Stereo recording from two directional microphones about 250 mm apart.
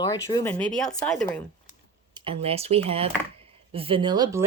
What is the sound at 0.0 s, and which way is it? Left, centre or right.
Speech, centre.